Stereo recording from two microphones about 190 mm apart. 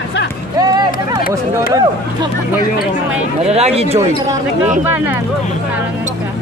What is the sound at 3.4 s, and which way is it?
Speech, 35° right (ahead or behind).